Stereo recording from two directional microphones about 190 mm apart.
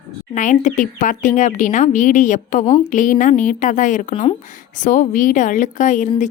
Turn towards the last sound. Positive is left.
turn(degrees=40)  # may be behind; listen again after turning